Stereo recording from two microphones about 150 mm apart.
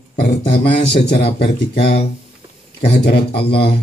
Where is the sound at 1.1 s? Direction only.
45° left (ahead or behind).